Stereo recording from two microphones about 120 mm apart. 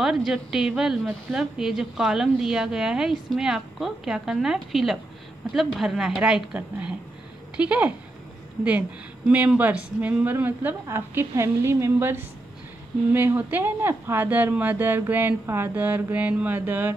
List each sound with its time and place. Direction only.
0.0 s a woman's voice: centre (ahead or behind)
9.3 s speech: 10° right (ahead or behind)